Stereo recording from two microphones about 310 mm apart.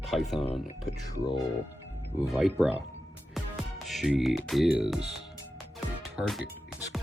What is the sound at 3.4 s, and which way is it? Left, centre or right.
Music, centre.